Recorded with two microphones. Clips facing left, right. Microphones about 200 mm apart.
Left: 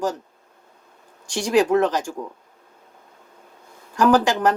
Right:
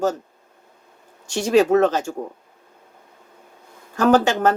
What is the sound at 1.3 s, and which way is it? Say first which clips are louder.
Speech: right 2 dB; 25° right (ahead or behind).